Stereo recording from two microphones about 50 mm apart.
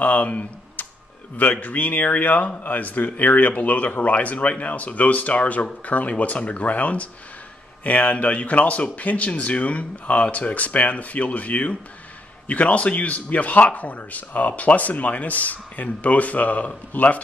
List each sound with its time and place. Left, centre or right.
0.0 s tick-tock: left
1.4 s a man's voice: left